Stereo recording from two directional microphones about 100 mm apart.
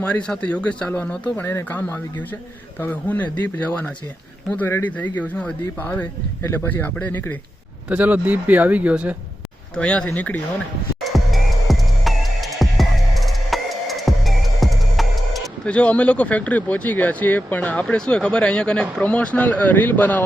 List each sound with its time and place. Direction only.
0.0 s speech: 10° left (ahead or behind)
7.9 s speech: 15° right (ahead or behind)
9.7 s speech: 10° left (ahead or behind)
11.0 s music: centre (ahead or behind)
15.6 s speech: 10° left (ahead or behind)